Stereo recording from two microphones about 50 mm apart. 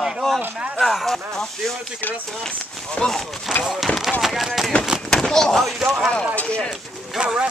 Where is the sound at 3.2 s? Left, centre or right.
Centre.